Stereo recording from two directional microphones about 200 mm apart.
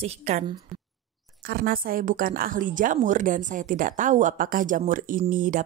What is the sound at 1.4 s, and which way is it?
A woman's voice, 50° right (ahead or behind).